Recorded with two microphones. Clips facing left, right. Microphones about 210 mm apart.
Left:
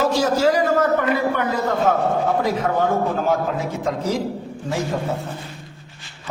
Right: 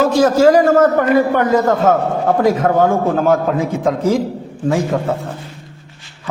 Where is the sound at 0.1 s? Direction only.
50° right (ahead or behind).